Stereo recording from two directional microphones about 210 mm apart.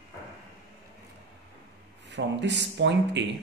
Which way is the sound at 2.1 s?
55° right (ahead or behind).